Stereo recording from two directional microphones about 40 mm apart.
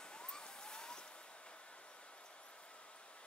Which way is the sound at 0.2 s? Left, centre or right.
Left.